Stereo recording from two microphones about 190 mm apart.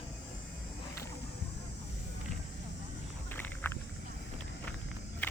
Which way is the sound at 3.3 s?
10° left (ahead or behind).